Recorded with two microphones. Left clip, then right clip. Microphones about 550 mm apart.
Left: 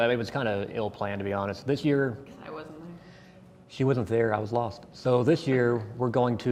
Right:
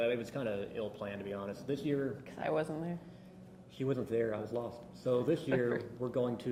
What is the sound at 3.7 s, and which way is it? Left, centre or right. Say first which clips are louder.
Speech: left 9 dB; left.